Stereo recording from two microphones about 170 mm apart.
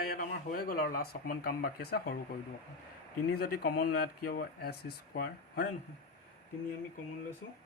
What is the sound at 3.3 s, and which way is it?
Speech, 65° left (ahead or behind).